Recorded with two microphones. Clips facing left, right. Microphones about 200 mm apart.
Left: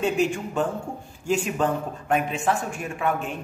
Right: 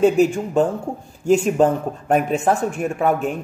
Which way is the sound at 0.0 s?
40° right (ahead or behind).